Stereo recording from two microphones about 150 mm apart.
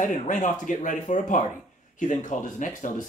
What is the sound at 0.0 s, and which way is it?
Speech, 55° left (ahead or behind).